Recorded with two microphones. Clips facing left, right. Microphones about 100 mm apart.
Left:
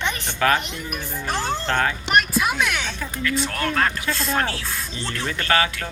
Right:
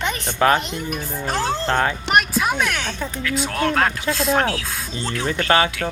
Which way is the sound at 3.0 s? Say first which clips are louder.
Right 1 dB; 20° right (ahead or behind).